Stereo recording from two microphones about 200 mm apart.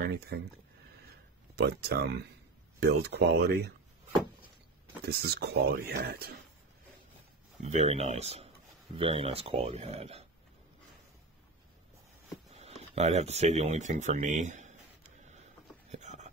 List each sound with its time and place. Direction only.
0.0 s speech: 55° right (ahead or behind)
1.5 s speech: 55° right (ahead or behind)
5.0 s speech: 50° right (ahead or behind)
7.6 s speech: 35° right (ahead or behind)
12.9 s speech: 35° right (ahead or behind)
15.9 s a sound: 35° right (ahead or behind)